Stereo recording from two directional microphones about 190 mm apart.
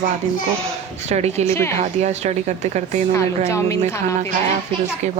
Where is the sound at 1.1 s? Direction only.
35° right (ahead or behind).